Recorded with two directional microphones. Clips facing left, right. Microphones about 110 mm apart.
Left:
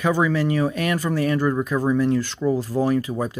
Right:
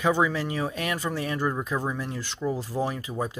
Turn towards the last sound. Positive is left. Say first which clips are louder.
# left 8 dB
turn(degrees=-15)  # may be behind; listen again after turning